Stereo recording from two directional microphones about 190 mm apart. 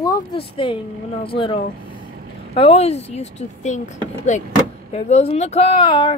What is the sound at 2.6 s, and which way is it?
Speech, 30° left (ahead or behind).